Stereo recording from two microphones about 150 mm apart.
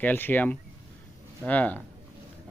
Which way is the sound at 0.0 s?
10° left (ahead or behind).